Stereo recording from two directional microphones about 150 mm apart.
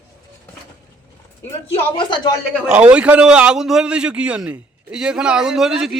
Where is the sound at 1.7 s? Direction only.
30° left (ahead or behind).